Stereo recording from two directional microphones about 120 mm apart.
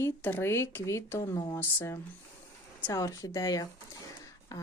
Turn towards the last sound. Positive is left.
turn(degrees=30)  # may be behind; listen again after turning